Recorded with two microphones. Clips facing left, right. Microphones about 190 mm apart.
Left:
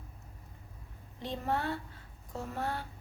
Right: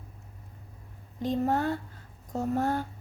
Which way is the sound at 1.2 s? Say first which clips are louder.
Right 7 dB; 45° right (ahead or behind).